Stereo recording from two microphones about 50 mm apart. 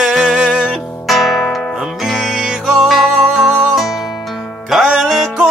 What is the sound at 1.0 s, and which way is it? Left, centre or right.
Music, centre.